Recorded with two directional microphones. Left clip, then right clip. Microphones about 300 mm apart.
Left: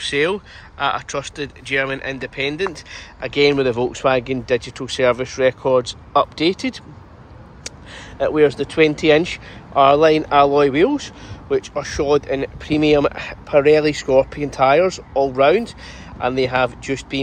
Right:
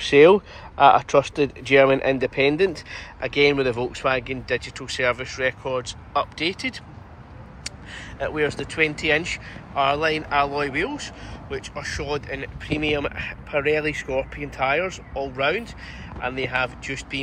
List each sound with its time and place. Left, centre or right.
0.0 s speech: centre; by 17.2 s left